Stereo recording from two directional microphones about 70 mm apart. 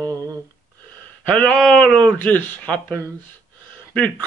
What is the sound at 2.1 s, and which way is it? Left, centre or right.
Speech, left.